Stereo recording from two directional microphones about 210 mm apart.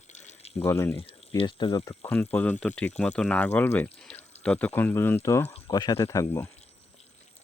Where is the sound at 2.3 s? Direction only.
10° left (ahead or behind).